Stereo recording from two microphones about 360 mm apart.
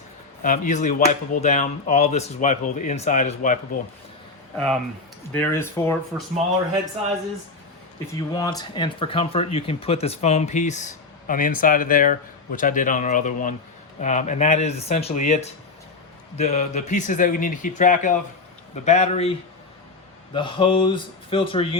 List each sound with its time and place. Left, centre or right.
0.4 s speech: left
4.5 s speech: centre
8.1 s speech: centre
20.3 s speech: centre